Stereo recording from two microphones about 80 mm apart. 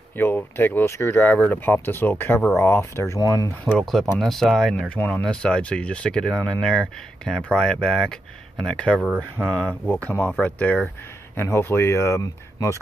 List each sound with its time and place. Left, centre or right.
0.1 s speech: left
3.7 s speech: centre
4.8 s speech: centre
8.9 s speech: centre
9.7 s speech: centre
11.4 s speech: left
12.2 s speech: left